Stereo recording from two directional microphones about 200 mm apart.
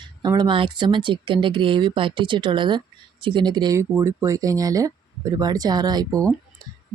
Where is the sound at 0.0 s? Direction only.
20° right (ahead or behind).